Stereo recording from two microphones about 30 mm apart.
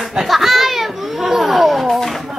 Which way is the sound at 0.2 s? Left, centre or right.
Centre.